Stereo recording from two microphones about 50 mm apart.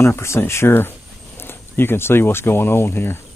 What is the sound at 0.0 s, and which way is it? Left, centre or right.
Speech, left.